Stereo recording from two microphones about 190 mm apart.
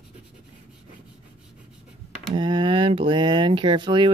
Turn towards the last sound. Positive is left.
turn(degrees=-25)  # may be behind; listen again after turning